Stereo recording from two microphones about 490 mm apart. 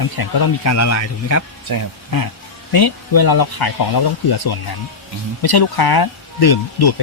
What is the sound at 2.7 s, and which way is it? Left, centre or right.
Speech, left.